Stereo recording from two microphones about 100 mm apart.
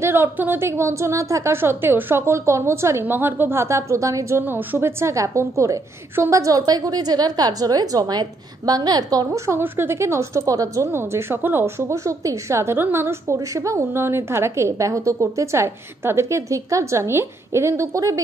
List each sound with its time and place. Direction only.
0.0 s a woman's voice: 20° right (ahead or behind); by 9.4 s 40° right (ahead or behind)
9.5 s a woman's voice: 25° right (ahead or behind)